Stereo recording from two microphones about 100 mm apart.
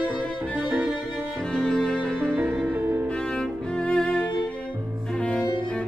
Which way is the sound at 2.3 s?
25° right (ahead or behind).